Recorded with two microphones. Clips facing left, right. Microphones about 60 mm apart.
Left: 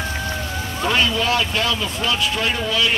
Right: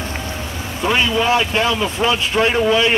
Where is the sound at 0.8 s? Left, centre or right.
Centre.